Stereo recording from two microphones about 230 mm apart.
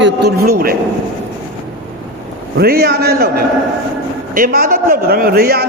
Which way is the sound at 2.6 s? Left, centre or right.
Right.